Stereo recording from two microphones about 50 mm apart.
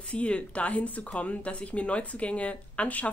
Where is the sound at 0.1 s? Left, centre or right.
Left.